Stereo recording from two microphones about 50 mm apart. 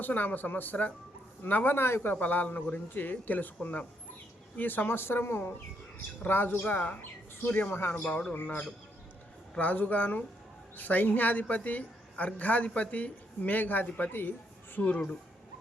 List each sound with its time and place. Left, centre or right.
0.0 s a woman's voice: left
2.1 s a woman's voice: left
6.7 s a woman's voice: left
7.7 s speech: left
8.4 s a woman's voice: left
14.1 s speech: left
14.8 s a woman's voice: left